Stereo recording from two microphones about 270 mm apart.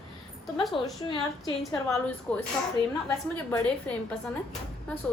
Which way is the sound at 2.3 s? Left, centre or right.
Centre.